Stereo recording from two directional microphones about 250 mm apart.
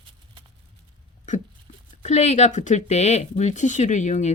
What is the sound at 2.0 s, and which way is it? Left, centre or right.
Speech, left.